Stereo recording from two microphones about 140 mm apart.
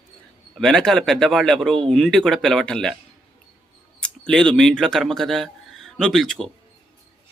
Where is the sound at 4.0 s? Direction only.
5° left (ahead or behind).